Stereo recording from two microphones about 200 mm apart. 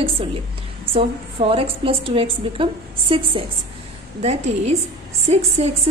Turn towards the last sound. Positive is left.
turn(degrees=-30)  # may be behind; listen again after turning